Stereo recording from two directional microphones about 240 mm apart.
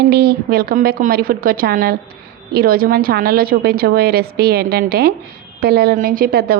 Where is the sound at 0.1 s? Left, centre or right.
Right.